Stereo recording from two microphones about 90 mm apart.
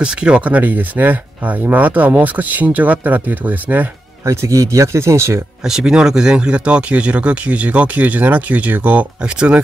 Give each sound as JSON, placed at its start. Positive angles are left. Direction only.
{"t": 0.0, "sound": "speech", "side_deg": -10}
{"t": 4.3, "sound": "speech", "side_deg": -35}
{"t": 5.6, "sound": "speech", "side_deg": -5}